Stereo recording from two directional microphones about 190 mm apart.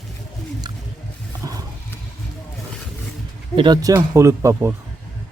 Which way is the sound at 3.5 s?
25° right (ahead or behind).